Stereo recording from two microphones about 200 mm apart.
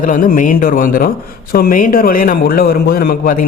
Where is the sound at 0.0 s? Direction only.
45° left (ahead or behind).